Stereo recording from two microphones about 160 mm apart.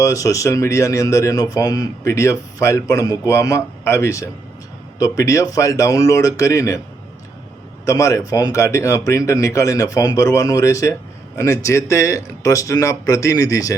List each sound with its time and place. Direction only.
0.0 s speech: 20° left (ahead or behind)
7.9 s speech: 20° left (ahead or behind)